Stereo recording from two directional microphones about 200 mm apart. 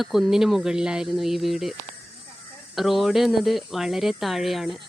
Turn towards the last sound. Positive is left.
turn(degrees=0)  # may be behind; listen again after turning